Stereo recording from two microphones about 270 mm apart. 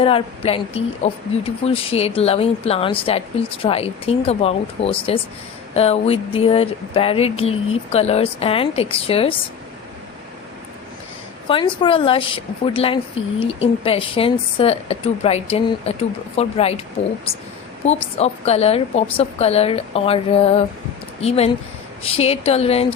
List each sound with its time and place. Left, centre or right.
0.0 s a woman's voice: left
11.4 s a woman's voice: centre
17.8 s a woman's voice: left